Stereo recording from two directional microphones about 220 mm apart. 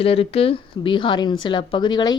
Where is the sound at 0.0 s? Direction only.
25° left (ahead or behind).